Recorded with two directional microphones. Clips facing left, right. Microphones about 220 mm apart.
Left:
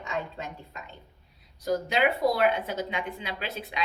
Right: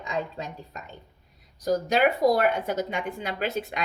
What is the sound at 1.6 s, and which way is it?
Speech, 45° right (ahead or behind).